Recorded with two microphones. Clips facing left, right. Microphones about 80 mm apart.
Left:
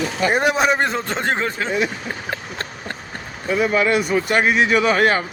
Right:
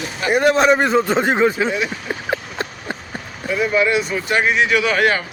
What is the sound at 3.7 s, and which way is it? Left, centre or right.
Speech, left.